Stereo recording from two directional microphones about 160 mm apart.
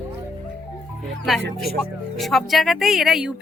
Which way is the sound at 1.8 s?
Centre (ahead or behind).